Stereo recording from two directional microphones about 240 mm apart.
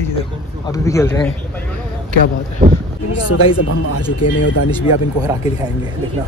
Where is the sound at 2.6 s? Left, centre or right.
Right.